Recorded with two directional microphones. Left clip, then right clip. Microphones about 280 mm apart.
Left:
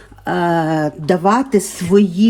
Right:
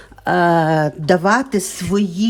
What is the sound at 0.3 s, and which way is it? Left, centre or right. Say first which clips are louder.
Speech: right 2 dB; right.